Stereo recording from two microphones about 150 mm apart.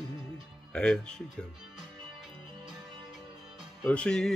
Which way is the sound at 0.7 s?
5° left (ahead or behind).